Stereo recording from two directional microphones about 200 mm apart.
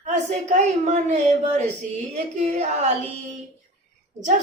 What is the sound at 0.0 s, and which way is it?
A woman's voice, 35° right (ahead or behind).